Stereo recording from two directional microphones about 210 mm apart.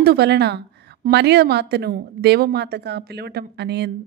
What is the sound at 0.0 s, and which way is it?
A woman's voice, 50° right (ahead or behind).